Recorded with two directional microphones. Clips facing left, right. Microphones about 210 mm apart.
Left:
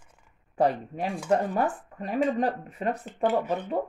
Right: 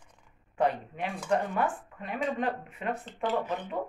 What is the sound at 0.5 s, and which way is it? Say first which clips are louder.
Speech: left 4 dB; 40° left (ahead or behind).